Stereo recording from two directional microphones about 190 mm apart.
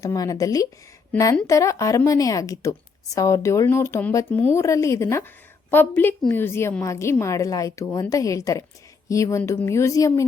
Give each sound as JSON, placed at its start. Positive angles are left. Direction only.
{"t": 0.0, "sound": "a woman's voice", "side_deg": 20}